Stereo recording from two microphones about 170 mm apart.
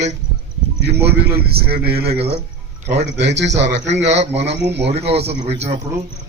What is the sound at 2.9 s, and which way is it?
A man's voice, 90° right.